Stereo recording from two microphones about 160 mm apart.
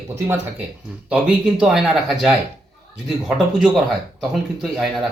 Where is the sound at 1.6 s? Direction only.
Centre (ahead or behind).